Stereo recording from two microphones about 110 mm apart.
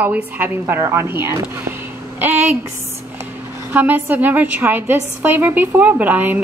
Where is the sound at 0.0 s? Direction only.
15° right (ahead or behind).